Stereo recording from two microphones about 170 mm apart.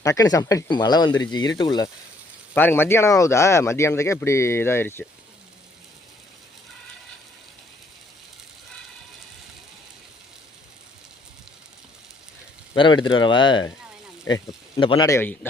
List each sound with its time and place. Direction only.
0.0 s speech: 20° left (ahead or behind)
2.6 s speech: 10° left (ahead or behind)
12.7 s speech: 30° left (ahead or behind)
15.0 s speech: 15° left (ahead or behind)